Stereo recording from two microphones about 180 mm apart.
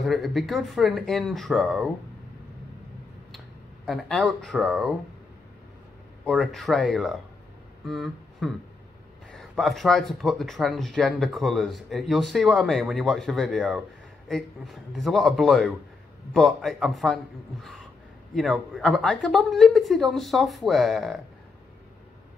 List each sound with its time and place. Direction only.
0.0 s speech: centre (ahead or behind)
3.8 s speech: centre (ahead or behind)
6.2 s speech: centre (ahead or behind)
7.8 s a sound: centre (ahead or behind)
9.3 s speech: centre (ahead or behind)